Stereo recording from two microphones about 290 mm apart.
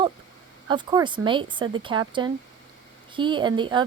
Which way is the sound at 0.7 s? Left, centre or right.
Centre.